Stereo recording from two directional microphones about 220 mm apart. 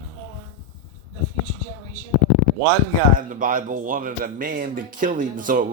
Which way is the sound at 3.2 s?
40° right (ahead or behind).